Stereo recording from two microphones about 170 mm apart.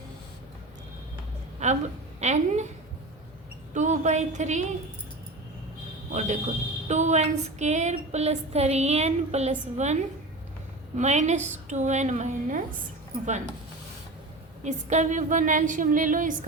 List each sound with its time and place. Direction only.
1.6 s a woman's voice: 40° right (ahead or behind)
3.8 s a woman's voice: 45° right (ahead or behind)
6.1 s a woman's voice: 45° right (ahead or behind)
6.8 s a sound: 45° right (ahead or behind)
10.9 s a woman's voice: 45° right (ahead or behind)
14.6 s a woman's voice: 45° right (ahead or behind)